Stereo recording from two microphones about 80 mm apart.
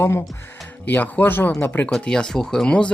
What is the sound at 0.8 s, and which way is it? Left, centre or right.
Speech, left.